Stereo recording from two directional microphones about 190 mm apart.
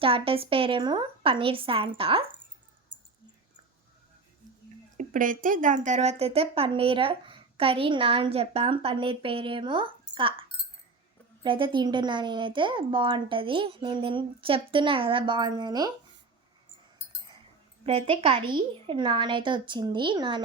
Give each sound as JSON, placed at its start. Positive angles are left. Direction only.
{"t": 0.0, "sound": "speech", "side_deg": -30}
{"t": 4.9, "sound": "speech", "side_deg": -45}
{"t": 11.4, "sound": "speech", "side_deg": -25}
{"t": 17.8, "sound": "speech", "side_deg": -30}